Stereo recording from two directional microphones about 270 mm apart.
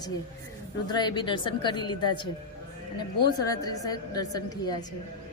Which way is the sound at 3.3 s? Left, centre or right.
Centre.